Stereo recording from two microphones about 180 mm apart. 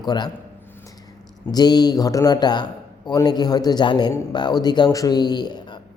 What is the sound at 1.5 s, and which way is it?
A man's voice, 20° left (ahead or behind).